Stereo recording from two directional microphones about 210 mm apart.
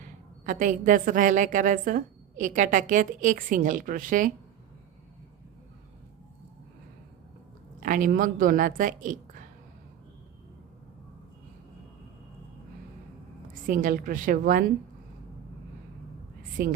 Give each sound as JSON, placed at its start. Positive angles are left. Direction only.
{"t": 0.4, "sound": "a woman's voice", "side_deg": -40}
{"t": 7.8, "sound": "a woman's voice", "side_deg": -40}
{"t": 13.7, "sound": "a woman's voice", "side_deg": -40}
{"t": 16.6, "sound": "a woman's voice", "side_deg": -45}